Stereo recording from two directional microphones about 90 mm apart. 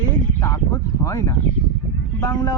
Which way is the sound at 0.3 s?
35° left (ahead or behind).